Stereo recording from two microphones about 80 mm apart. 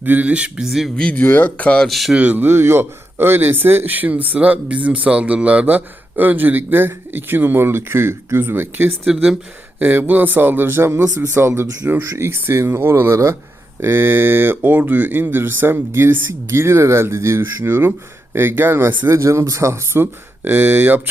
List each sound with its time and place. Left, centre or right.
0.0 s speech: right
1.1 s speech: left
1.9 s speech: centre
2.1 s speech: centre
19.0 s speech: right